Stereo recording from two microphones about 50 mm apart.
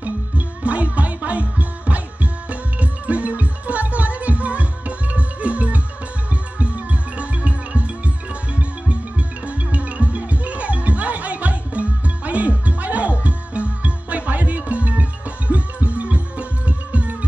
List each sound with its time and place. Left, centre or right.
0.7 s music: right
9.5 s music: right